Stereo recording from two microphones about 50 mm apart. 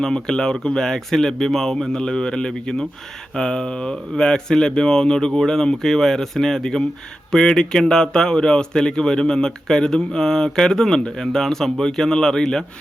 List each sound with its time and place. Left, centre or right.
0.0 s speech: centre